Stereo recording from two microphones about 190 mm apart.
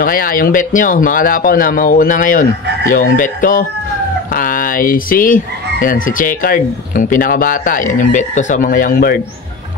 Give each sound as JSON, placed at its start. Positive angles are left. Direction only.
{"t": 0.0, "sound": "croak", "side_deg": 50}